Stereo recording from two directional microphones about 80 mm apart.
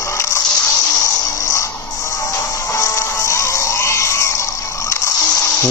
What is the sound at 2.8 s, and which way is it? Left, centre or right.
Music, left.